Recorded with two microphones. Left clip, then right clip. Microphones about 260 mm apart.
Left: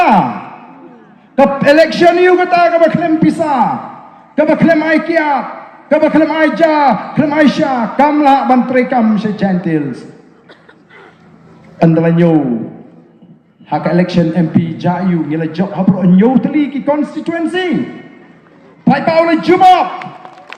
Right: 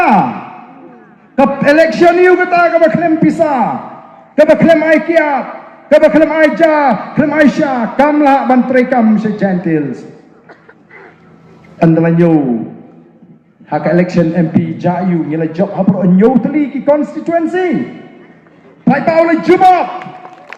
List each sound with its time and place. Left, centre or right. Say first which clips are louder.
1.4 s a man's voice: left 1 dB; left
11.8 s a man's voice: right 1 dB; left
13.7 s a man's voice: right 2 dB; left
18.9 s a man's voice: right 1 dB; left